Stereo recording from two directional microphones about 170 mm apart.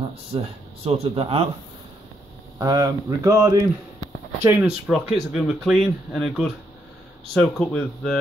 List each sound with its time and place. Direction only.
0.3 s speech: 30° right (ahead or behind)
2.6 s speech: 20° right (ahead or behind)
4.9 s speech: centre (ahead or behind)